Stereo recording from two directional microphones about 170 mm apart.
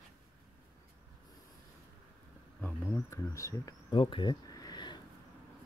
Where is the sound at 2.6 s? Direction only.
10° left (ahead or behind).